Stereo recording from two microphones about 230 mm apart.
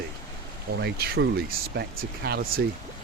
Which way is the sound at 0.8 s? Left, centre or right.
Right.